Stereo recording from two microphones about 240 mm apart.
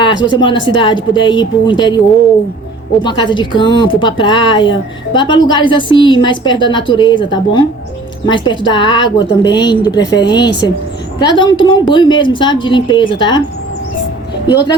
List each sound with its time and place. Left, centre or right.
0.0 s speech: centre
3.0 s a woman's voice: centre